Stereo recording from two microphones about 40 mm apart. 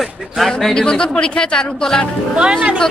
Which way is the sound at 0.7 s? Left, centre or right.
Left.